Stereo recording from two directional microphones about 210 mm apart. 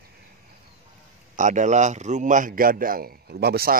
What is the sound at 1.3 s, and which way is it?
A man's voice, 35° right (ahead or behind).